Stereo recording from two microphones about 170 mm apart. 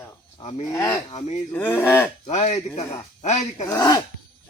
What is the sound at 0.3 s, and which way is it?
Speech, 35° left (ahead or behind).